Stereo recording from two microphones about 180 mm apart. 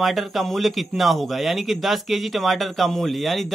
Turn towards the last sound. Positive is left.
turn(degrees=0)  # may be behind; listen again after turning